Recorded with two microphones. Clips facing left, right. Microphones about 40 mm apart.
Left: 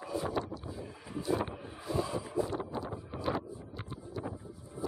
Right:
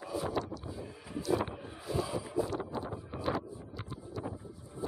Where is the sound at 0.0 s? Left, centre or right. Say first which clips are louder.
Even; centre.